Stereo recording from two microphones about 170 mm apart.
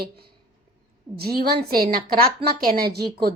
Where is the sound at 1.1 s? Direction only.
5° right (ahead or behind).